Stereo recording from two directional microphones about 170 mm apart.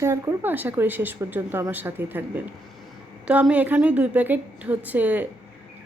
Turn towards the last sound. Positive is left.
turn(degrees=-10)  # may be behind; listen again after turning